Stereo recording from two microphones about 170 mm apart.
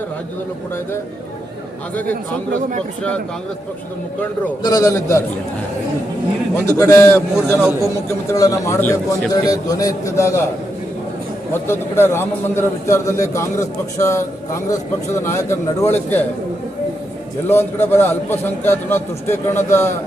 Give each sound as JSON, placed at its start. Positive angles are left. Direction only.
{"t": 4.6, "sound": "a man's voice", "side_deg": 20}
{"t": 6.7, "sound": "a man's voice", "side_deg": 15}
{"t": 11.5, "sound": "a man's voice", "side_deg": 15}
{"t": 17.5, "sound": "a man's voice", "side_deg": 15}